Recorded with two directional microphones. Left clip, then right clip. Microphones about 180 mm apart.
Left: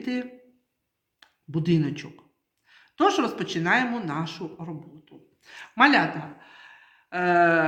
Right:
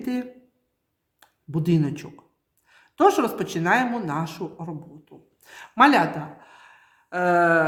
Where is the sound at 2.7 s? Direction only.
50° right (ahead or behind).